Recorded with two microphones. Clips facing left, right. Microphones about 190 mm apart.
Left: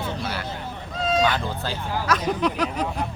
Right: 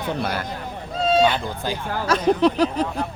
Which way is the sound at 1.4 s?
15° right (ahead or behind).